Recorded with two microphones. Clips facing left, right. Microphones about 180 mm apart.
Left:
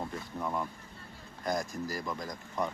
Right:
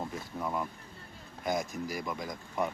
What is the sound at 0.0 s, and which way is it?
Speech, centre (ahead or behind).